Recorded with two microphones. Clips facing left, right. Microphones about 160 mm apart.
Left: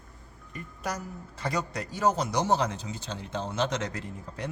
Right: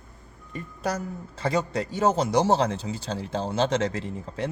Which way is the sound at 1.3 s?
25° right (ahead or behind).